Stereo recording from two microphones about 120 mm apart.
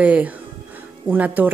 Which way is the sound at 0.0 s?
10° right (ahead or behind).